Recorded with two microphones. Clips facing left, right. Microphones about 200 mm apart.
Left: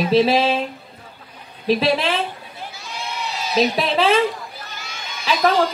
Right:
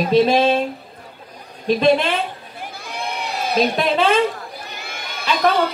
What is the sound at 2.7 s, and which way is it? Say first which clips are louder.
Sheep: right 4 dB; 55° right (ahead or behind).